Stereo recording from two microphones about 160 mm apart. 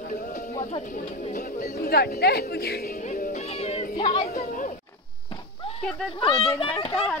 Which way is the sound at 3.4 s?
40° left (ahead or behind).